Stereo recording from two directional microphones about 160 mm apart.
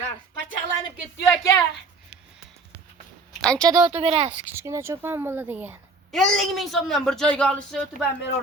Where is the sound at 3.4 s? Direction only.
5° left (ahead or behind).